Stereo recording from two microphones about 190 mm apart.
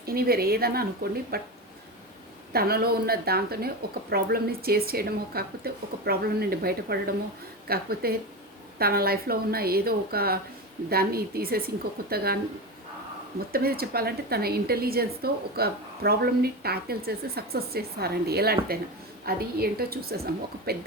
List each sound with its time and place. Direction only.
0.0 s a woman's voice: 55° right (ahead or behind)
2.5 s a woman's voice: 55° right (ahead or behind)
13.5 s a woman's voice: 55° right (ahead or behind)